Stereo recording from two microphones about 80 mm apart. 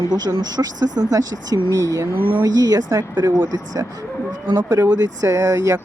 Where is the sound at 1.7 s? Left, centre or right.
Right.